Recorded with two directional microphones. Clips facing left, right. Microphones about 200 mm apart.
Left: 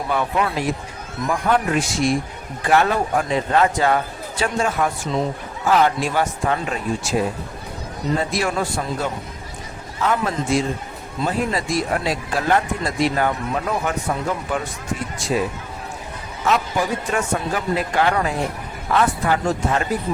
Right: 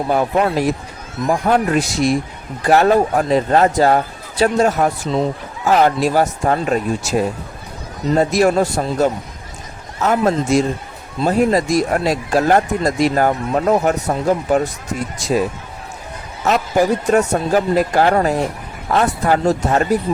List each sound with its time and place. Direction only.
0.1 s a man's voice: 40° right (ahead or behind)
16.4 s speech: 40° right (ahead or behind)